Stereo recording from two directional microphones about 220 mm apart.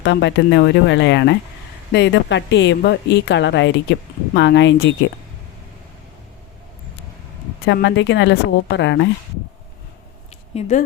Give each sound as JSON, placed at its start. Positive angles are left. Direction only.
{"t": 0.0, "sound": "a woman's voice", "side_deg": 55}
{"t": 7.6, "sound": "a woman's voice", "side_deg": 50}
{"t": 10.5, "sound": "speech", "side_deg": 30}